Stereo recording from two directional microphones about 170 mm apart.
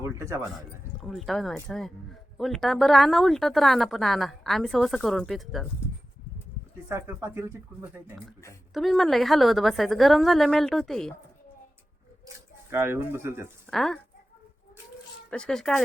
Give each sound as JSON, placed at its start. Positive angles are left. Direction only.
{"t": 0.0, "sound": "speech", "side_deg": -15}
{"t": 1.0, "sound": "a woman's voice", "side_deg": 0}
{"t": 6.8, "sound": "speech", "side_deg": -15}
{"t": 8.7, "sound": "a woman's voice", "side_deg": 0}
{"t": 12.7, "sound": "speech", "side_deg": -15}
{"t": 13.7, "sound": "speech", "side_deg": 0}
{"t": 15.3, "sound": "a woman's voice", "side_deg": 5}